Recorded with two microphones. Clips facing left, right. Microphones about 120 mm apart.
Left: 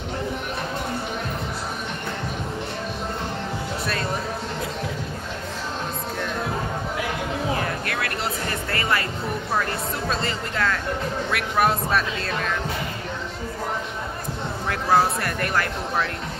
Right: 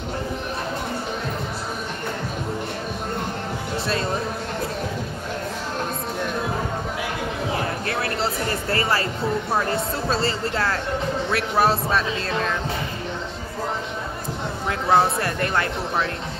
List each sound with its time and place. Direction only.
7.8 s music: 30° right (ahead or behind)
9.6 s speech: 30° right (ahead or behind)
14.7 s speech: 25° right (ahead or behind)